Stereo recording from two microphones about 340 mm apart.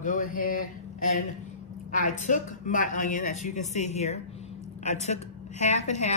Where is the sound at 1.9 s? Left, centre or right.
Left.